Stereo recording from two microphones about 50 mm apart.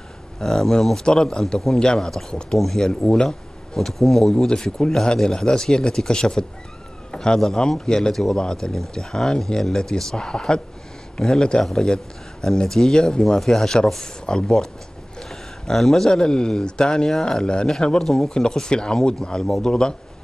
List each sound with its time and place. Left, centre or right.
0.4 s speech: centre